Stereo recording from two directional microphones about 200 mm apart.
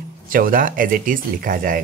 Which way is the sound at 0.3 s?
45° right (ahead or behind).